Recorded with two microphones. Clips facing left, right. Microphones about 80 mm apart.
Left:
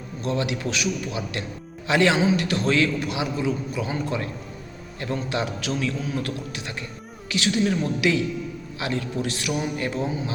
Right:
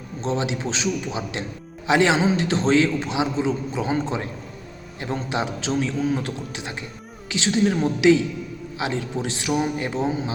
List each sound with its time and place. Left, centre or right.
0.2 s a man's voice: right